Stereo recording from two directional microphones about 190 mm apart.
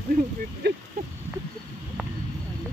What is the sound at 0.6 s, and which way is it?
Speech, 60° right (ahead or behind).